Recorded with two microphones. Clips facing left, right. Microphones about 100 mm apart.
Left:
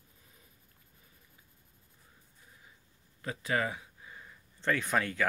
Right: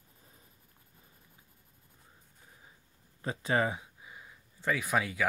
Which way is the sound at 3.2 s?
25° right (ahead or behind).